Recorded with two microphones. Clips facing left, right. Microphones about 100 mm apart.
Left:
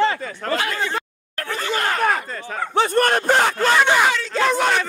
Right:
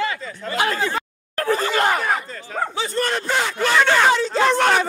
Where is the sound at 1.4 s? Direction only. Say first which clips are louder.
Right 7 dB; 35° right (ahead or behind).